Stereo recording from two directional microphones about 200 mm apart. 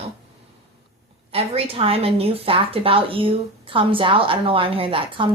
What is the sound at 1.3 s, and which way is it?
Speech, 30° right (ahead or behind).